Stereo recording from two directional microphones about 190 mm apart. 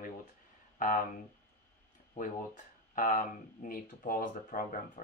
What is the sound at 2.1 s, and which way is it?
Speech, 45° left (ahead or behind).